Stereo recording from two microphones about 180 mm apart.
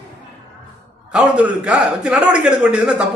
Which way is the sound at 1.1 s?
5° right (ahead or behind).